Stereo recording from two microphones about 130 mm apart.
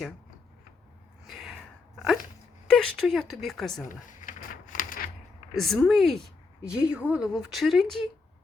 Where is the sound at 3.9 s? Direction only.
85° left.